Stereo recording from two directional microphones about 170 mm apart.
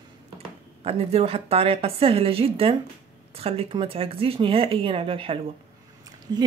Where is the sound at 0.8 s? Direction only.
35° right (ahead or behind).